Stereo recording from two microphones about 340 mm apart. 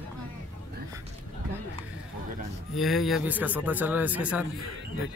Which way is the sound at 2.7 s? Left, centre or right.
Centre.